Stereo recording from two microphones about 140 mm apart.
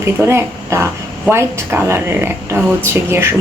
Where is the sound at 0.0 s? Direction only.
20° right (ahead or behind).